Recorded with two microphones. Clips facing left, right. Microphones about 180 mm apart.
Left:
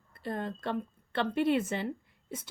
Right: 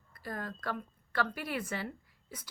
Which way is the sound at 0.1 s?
25° left (ahead or behind).